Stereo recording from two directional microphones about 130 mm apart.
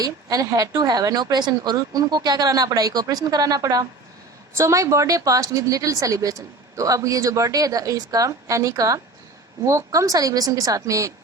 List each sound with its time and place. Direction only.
0.0 s a woman's voice: 30° right (ahead or behind)